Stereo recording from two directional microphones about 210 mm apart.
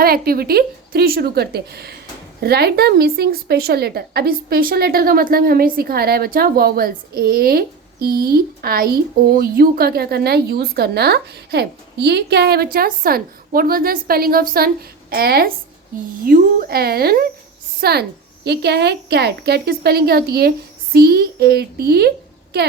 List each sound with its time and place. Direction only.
0.0 s a woman's voice: 45° right (ahead or behind)